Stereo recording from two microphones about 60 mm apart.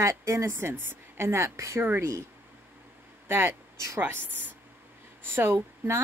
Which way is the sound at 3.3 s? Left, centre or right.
Right.